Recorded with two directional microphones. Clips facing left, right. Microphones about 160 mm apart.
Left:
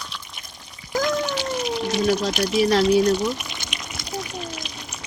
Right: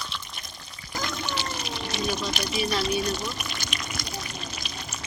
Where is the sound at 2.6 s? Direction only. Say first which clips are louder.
Left 10 dB; 90° left.